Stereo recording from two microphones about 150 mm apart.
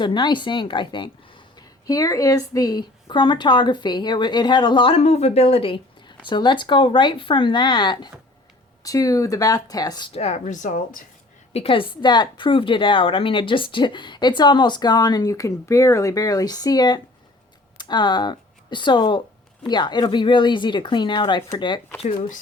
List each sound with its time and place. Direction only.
0.0 s a woman's voice: 30° left (ahead or behind)
10.2 s speech: 50° left (ahead or behind)
11.5 s a woman's voice: 40° left (ahead or behind)